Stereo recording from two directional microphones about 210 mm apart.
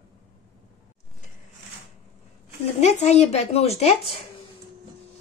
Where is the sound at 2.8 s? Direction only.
30° left (ahead or behind).